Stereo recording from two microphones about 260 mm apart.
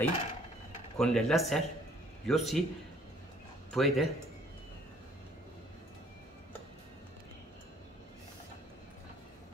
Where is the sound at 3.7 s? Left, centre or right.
Centre.